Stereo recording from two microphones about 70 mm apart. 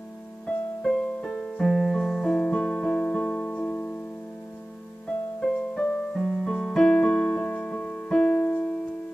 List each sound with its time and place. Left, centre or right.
0.8 s piano: centre
5.4 s music: centre
6.2 s piano: centre; by 8.7 s left